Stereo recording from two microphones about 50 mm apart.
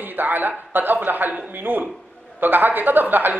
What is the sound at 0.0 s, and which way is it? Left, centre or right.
Speech, right.